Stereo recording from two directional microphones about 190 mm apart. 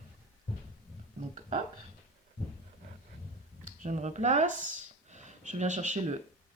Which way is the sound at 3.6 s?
40° right (ahead or behind).